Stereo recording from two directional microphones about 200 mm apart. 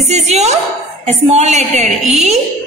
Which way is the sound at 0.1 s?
35° right (ahead or behind).